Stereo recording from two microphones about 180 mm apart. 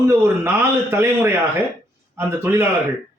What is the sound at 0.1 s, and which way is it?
A man's voice, 15° right (ahead or behind).